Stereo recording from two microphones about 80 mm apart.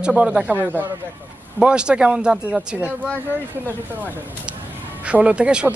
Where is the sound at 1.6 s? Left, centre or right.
Centre.